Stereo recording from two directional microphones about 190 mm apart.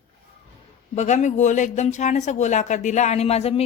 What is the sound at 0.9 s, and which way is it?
A woman's voice, 40° left (ahead or behind).